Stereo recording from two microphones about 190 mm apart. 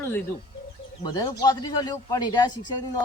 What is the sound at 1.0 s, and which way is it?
Speech, 20° left (ahead or behind).